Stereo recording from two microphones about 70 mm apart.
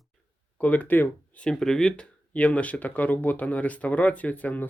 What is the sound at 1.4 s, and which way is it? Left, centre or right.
Speech, centre.